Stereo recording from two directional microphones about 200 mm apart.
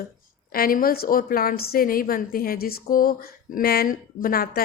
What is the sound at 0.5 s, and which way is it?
A woman's voice, 45° left (ahead or behind).